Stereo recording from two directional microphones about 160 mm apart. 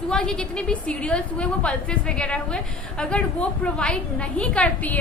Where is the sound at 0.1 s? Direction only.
5° left (ahead or behind).